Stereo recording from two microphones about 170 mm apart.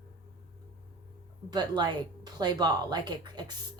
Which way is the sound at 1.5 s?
25° right (ahead or behind).